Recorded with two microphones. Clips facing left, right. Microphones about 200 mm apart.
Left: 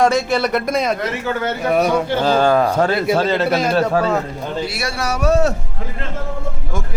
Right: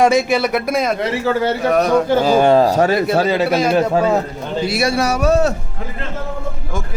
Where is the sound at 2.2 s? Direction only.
10° right (ahead or behind).